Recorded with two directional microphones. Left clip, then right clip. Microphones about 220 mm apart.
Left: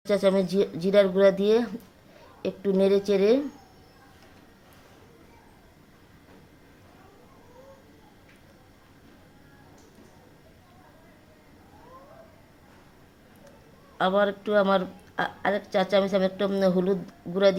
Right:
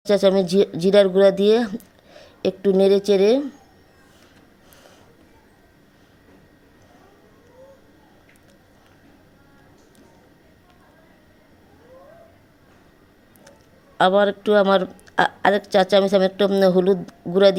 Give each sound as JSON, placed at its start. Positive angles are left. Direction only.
{"t": 0.0, "sound": "speech", "side_deg": -25}
{"t": 14.0, "sound": "speech", "side_deg": -30}